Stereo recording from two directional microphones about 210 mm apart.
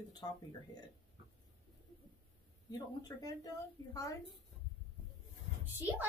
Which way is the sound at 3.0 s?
15° left (ahead or behind).